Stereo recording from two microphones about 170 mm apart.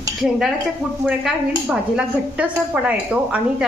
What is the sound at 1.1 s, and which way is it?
A woman's voice, 5° right (ahead or behind).